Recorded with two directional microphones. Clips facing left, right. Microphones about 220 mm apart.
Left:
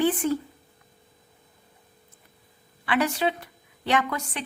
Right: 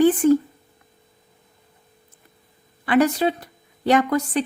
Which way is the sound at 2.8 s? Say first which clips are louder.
Right 7 dB; 45° right (ahead or behind).